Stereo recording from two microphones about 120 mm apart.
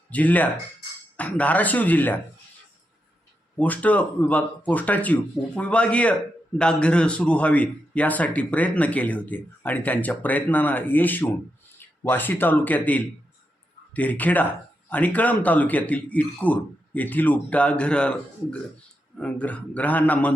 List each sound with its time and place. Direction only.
0.1 s a man's voice: 15° left (ahead or behind)
3.6 s a man's voice: 10° left (ahead or behind)